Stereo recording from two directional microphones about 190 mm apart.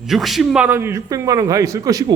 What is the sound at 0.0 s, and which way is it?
A man's voice, centre (ahead or behind).